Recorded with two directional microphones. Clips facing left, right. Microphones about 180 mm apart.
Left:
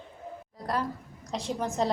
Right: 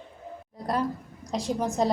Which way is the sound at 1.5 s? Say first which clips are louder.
Right 3 dB; 10° right (ahead or behind).